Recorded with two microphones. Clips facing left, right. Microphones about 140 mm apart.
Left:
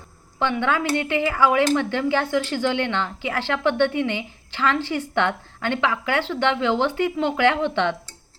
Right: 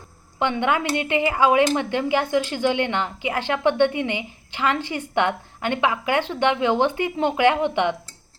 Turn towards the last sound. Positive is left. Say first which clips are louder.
# right 1 dB
turn(degrees=-15)  # may be behind; listen again after turning